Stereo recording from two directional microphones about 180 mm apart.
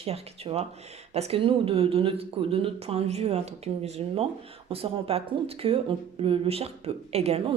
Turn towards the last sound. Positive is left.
turn(degrees=-35)  # may be behind; listen again after turning